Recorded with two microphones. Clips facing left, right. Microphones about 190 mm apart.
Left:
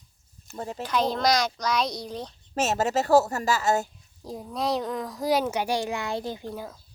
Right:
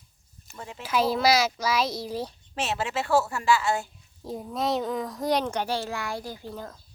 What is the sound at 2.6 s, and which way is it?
A woman's voice, 40° left (ahead or behind).